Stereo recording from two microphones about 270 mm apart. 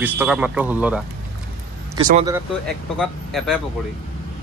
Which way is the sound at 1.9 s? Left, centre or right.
Centre.